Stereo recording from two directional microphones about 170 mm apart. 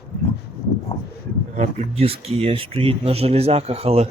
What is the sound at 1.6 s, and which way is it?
Speech, 40° right (ahead or behind).